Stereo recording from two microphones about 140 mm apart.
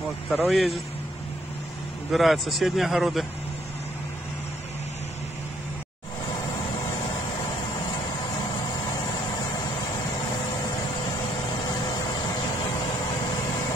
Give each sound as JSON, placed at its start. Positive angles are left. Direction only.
{"t": 0.3, "sound": "speech", "side_deg": 0}
{"t": 2.1, "sound": "speech", "side_deg": 0}
{"t": 11.7, "sound": "vehicle", "side_deg": 30}